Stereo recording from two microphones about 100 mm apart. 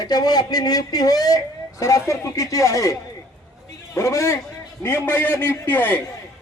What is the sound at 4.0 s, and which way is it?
A man's voice, 30° left (ahead or behind).